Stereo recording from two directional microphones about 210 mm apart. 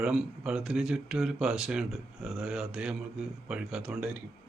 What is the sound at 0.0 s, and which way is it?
Speech, centre (ahead or behind).